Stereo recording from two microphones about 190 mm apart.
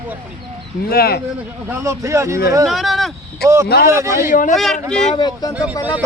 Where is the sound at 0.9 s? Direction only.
55° left (ahead or behind).